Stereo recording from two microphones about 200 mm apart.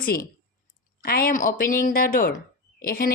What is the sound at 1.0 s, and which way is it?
A woman's voice, 45° left (ahead or behind).